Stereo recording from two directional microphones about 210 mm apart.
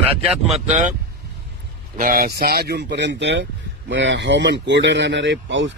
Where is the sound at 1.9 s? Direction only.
40° right (ahead or behind); by 5.6 s 60° right (ahead or behind).